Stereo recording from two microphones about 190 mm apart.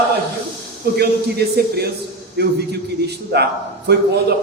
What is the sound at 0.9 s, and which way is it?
A man's voice, 55° right (ahead or behind).